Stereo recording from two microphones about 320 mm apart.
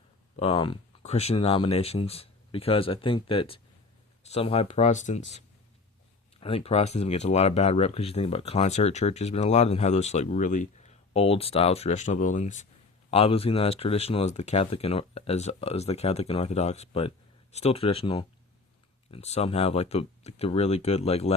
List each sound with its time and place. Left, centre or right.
0.3 s speech: centre
6.4 s speech: centre